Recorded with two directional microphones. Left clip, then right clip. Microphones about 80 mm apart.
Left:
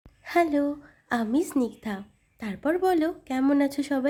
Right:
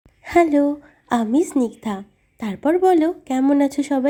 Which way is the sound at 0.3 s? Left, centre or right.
Right.